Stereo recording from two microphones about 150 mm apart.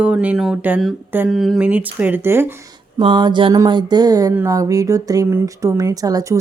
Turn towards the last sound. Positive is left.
turn(degrees=-25)  # may be behind; listen again after turning